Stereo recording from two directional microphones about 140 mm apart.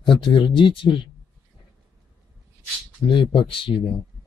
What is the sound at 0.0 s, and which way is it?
Speech, 35° left (ahead or behind).